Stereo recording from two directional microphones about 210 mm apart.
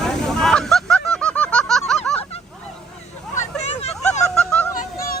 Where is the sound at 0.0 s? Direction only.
Centre (ahead or behind).